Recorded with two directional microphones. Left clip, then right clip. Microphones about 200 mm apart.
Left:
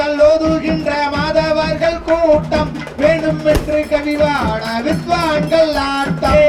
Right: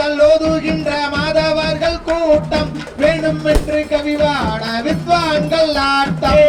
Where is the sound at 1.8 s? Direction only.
40° right (ahead or behind).